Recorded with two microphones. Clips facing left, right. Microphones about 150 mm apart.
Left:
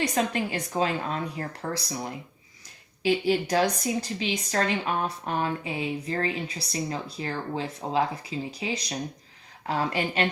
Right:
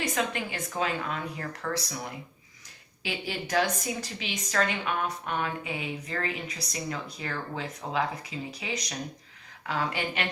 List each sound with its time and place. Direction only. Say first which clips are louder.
0.0 s speech: left 4 dB; 35° left (ahead or behind)
3.0 s speech: left 11 dB; 35° left (ahead or behind)